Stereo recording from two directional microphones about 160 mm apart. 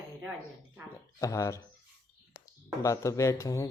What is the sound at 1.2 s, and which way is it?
Speech, 20° left (ahead or behind).